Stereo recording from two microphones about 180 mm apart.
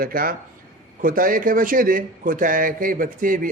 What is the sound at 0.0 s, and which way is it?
A man's voice, 55° right (ahead or behind).